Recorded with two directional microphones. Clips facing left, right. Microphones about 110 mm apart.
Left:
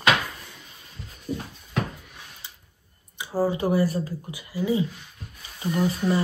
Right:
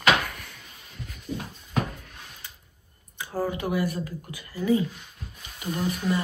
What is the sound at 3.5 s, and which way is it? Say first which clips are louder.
Speech: left 4 dB; 35° left (ahead or behind).